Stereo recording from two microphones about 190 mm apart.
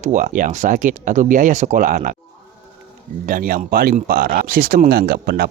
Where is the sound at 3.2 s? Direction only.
50° right (ahead or behind).